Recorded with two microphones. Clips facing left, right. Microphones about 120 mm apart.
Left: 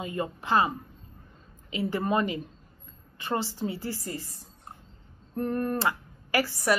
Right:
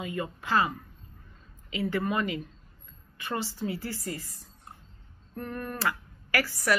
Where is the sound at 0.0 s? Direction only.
30° left (ahead or behind).